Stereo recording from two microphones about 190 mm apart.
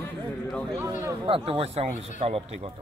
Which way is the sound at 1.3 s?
30° right (ahead or behind).